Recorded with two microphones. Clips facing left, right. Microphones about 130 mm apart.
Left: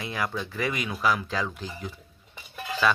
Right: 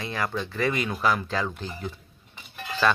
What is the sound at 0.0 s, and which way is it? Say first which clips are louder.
Speech: right 1 dB; 10° left (ahead or behind).